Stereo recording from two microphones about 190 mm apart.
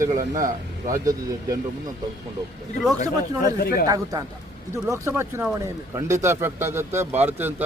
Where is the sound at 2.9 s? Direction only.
20° right (ahead or behind).